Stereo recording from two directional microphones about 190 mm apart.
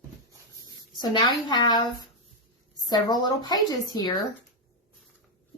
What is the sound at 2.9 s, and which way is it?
A woman's voice, 20° left (ahead or behind).